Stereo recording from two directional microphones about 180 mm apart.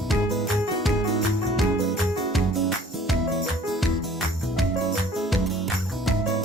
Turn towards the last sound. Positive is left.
turn(degrees=0)  # may be behind; listen again after turning